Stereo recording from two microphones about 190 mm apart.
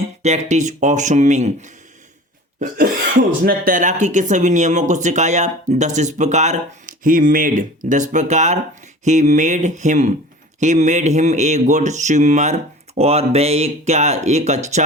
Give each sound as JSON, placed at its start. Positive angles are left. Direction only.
{"t": 0.2, "sound": "speech", "side_deg": -35}
{"t": 2.6, "sound": "speech", "side_deg": -55}